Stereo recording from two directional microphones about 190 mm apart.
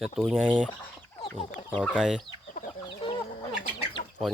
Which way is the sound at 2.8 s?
25° left (ahead or behind).